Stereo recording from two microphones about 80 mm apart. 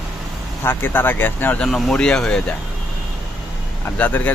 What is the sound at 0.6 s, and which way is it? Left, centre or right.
Speech, left.